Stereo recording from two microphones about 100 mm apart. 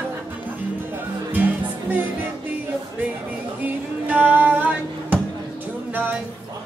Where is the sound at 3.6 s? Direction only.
15° right (ahead or behind).